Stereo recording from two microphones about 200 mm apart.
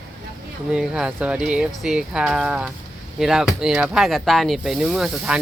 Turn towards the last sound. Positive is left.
turn(degrees=-5)  # may be behind; listen again after turning